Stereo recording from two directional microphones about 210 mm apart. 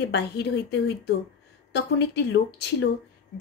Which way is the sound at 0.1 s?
55° left (ahead or behind).